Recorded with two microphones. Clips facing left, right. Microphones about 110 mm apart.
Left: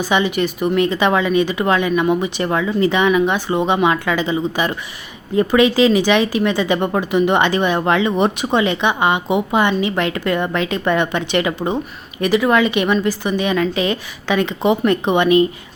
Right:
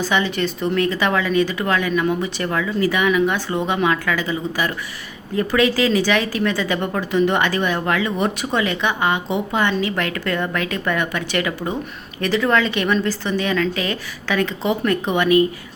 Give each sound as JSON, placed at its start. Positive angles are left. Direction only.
{"t": 0.0, "sound": "speech", "side_deg": 15}